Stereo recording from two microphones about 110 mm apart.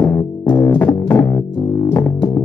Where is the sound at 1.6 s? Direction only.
15° left (ahead or behind).